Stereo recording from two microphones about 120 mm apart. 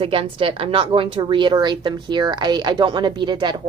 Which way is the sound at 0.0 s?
50° right (ahead or behind).